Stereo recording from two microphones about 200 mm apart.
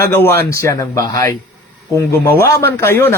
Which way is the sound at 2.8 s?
10° left (ahead or behind).